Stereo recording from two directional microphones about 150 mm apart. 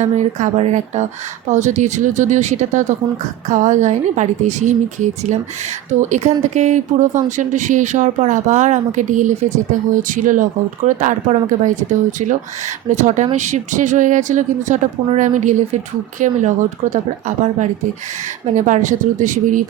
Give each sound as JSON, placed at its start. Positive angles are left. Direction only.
{"t": 0.0, "sound": "speech", "side_deg": -50}
{"t": 5.9, "sound": "speech", "side_deg": -55}